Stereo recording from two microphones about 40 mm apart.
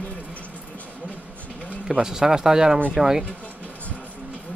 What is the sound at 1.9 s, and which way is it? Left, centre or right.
Speech, centre.